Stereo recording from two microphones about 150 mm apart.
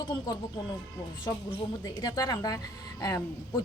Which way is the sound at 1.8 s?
25° left (ahead or behind).